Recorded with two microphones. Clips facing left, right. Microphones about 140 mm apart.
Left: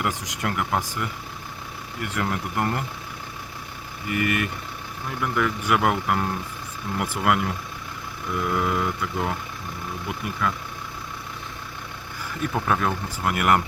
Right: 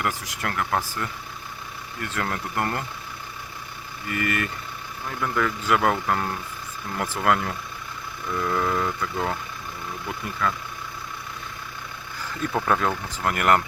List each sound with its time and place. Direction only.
0.0 s speech: 20° left (ahead or behind)
4.1 s speech: 15° left (ahead or behind)
12.6 s speech: 5° left (ahead or behind)
13.2 s speech: 15° left (ahead or behind)